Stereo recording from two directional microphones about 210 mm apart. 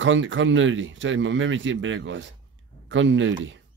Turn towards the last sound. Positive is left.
turn(degrees=-65)  # may be behind; listen again after turning